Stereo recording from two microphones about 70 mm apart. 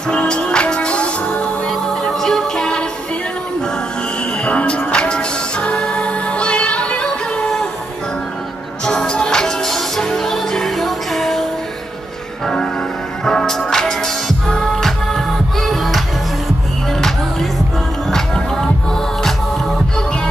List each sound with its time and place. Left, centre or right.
0.1 s music: centre
1.7 s music: centre
4.5 s music: centre
8.8 s music: centre
13.2 s music: centre
18.1 s music: centre